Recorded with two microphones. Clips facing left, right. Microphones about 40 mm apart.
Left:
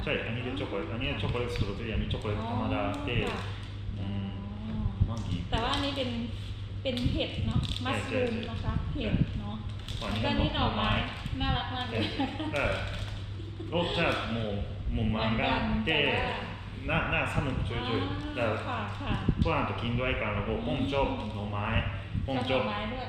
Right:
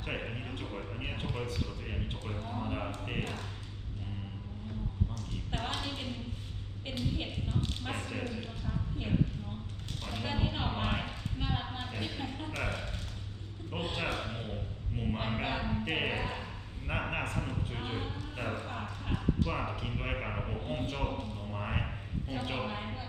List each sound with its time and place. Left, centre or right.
0.0 s a man's voice: left
5.1 s a man's voice: left